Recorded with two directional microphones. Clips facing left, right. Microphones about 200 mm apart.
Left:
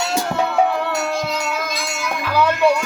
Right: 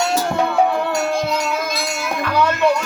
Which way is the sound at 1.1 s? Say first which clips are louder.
Right 3 dB; 50° right (ahead or behind).